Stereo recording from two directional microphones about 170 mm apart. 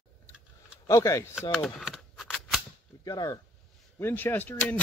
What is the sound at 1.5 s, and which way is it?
Cap gun, centre (ahead or behind).